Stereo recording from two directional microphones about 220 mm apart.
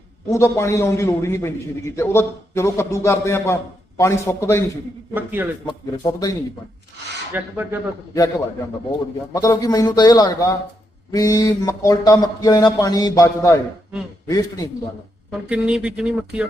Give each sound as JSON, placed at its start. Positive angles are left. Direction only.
{"t": 0.3, "sound": "a man's voice", "side_deg": 10}
{"t": 5.1, "sound": "speech", "side_deg": -10}
{"t": 5.6, "sound": "a man's voice", "side_deg": 15}
{"t": 7.3, "sound": "speech", "side_deg": -10}
{"t": 9.3, "sound": "a man's voice", "side_deg": 15}
{"t": 15.3, "sound": "speech", "side_deg": -5}